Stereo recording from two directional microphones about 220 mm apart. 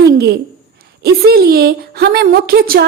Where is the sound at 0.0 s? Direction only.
45° right (ahead or behind).